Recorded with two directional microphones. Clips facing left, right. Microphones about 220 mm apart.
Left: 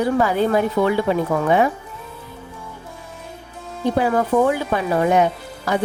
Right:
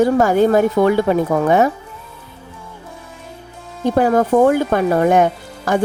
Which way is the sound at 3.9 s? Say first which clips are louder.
Right 5 dB; 45° right (ahead or behind).